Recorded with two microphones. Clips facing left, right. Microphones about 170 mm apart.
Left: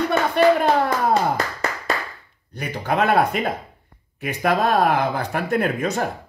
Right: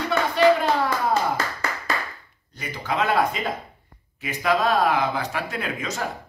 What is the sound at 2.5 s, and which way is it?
Speech, 60° left (ahead or behind).